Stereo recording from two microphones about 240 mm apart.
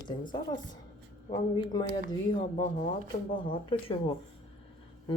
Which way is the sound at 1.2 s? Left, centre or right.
Left.